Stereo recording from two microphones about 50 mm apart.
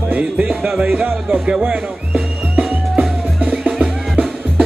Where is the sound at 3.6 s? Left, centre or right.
Centre.